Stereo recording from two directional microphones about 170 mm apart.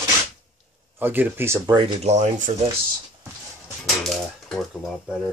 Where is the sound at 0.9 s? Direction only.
10° right (ahead or behind).